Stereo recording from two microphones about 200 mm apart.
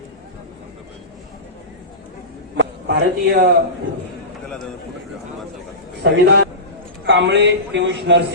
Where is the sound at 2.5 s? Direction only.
55° right (ahead or behind).